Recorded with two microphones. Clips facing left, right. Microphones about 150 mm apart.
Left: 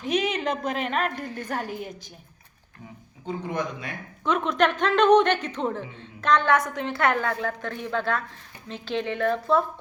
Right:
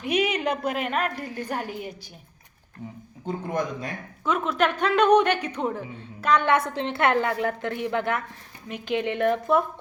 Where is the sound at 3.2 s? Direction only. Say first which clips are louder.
Right 1 dB; 45° right (ahead or behind).